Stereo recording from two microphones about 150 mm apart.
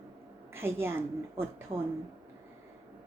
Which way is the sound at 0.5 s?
15° right (ahead or behind).